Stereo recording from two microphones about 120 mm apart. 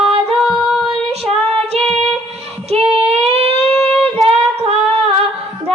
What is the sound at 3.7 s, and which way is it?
Humming, centre (ahead or behind).